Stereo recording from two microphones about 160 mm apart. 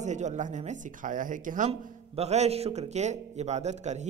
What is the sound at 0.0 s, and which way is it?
Speech, 50° right (ahead or behind).